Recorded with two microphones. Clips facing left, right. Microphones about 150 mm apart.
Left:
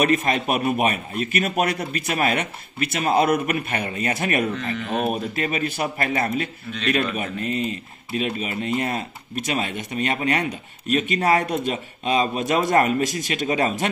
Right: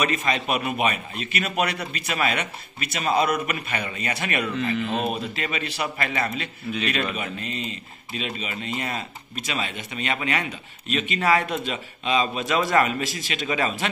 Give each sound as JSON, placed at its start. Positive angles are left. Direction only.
{"t": 0.0, "sound": "a man's voice", "side_deg": 50}
{"t": 4.7, "sound": "speech", "side_deg": 0}
{"t": 5.1, "sound": "a man's voice", "side_deg": 45}